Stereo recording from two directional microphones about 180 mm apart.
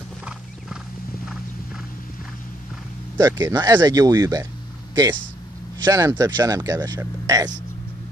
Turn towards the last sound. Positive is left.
turn(degrees=-20)  # may be behind; listen again after turning